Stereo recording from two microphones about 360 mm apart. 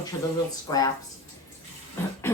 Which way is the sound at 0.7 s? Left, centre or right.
Centre.